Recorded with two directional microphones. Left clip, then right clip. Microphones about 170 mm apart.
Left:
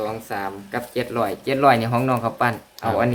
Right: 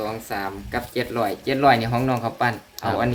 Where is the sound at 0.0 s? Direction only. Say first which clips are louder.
Left 1 dB; 5° right (ahead or behind); by 2.6 s 15° left (ahead or behind).